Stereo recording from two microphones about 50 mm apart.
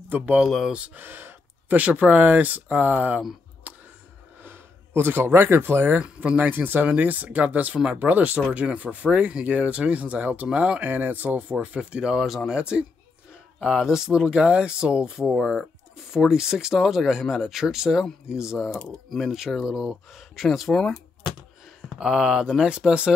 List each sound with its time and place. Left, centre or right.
0.7 s speech: right
0.9 s gasp: right
1.8 s speech: right
3.7 s a sound: right
4.4 s speech: right
5.9 s speech: right
10.9 s speech: right
11.6 s speech: right
12.2 s speech: centre
12.5 s speech: centre
22.0 s speech: centre